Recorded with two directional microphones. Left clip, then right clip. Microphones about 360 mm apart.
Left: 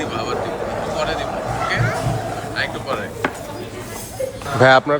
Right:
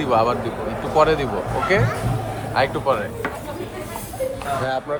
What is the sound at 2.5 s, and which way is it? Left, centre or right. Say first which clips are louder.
Speech: right 6 dB; centre.